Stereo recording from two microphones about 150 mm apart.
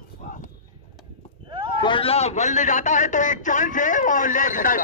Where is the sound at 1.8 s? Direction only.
35° left (ahead or behind).